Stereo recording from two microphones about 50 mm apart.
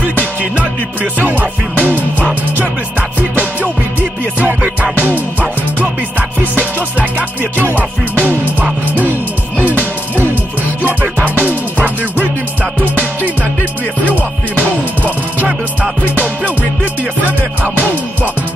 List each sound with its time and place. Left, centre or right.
1.2 s music: right
5.0 s music: right
10.8 s music: right